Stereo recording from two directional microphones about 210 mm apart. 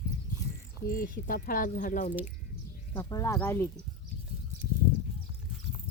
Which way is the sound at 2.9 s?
15° left (ahead or behind).